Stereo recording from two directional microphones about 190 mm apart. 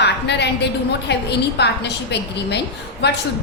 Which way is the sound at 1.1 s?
60° left (ahead or behind).